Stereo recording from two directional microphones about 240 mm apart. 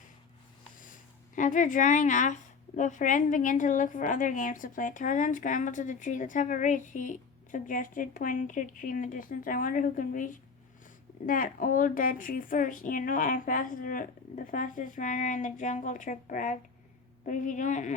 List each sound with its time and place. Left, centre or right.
1.4 s a woman's voice: left